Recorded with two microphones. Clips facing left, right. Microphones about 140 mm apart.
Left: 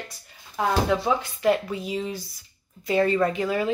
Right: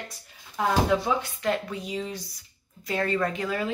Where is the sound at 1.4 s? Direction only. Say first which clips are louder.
Left 5 dB; 5° left (ahead or behind).